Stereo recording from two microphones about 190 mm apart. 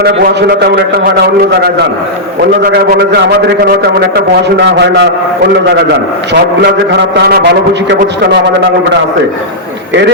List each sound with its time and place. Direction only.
0.0 s a man's voice: 60° right (ahead or behind)
2.7 s a man's voice: 55° right (ahead or behind)
6.3 s a man's voice: 60° right (ahead or behind)